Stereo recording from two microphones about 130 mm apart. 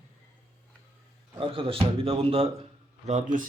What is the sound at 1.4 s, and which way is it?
Speech, 40° right (ahead or behind).